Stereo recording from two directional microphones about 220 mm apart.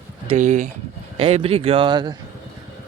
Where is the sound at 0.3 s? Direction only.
35° right (ahead or behind).